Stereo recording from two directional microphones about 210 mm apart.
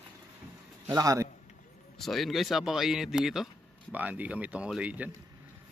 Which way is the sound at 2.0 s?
Centre (ahead or behind).